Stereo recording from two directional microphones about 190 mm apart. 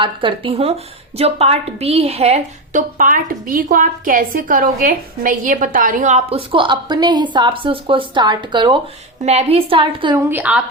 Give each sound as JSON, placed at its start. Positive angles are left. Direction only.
{"t": 0.0, "sound": "a woman's voice", "side_deg": -25}
{"t": 9.2, "sound": "a woman's voice", "side_deg": -35}
{"t": 10.2, "sound": "a woman's voice", "side_deg": -10}